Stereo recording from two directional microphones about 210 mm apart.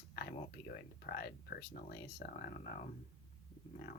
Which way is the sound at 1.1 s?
45° left (ahead or behind).